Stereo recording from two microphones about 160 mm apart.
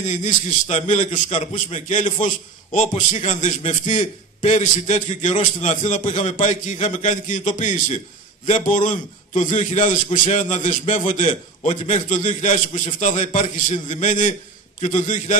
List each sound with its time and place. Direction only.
0.1 s a man's voice: 50° left (ahead or behind)